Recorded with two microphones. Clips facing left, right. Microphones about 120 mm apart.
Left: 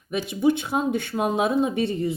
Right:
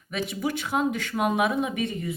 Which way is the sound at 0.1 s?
25° left (ahead or behind).